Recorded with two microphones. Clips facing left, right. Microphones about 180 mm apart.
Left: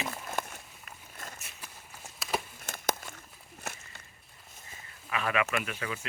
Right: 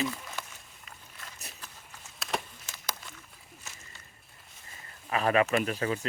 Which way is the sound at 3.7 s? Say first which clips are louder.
Left 10 dB; 65° left (ahead or behind).